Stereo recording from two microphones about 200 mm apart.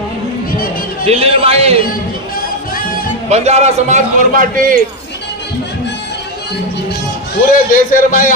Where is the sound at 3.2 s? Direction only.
35° right (ahead or behind).